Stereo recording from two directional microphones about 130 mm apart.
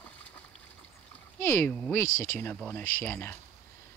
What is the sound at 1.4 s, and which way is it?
Speech, 20° left (ahead or behind).